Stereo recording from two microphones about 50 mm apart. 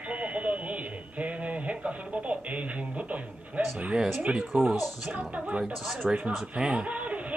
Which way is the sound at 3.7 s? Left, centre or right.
Right.